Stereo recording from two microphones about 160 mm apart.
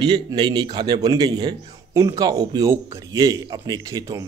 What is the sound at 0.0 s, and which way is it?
A man's voice, 25° right (ahead or behind).